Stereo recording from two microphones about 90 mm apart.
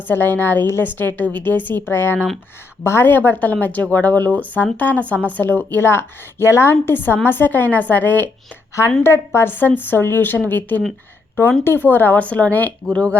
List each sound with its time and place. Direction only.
0.1 s speech: 20° left (ahead or behind)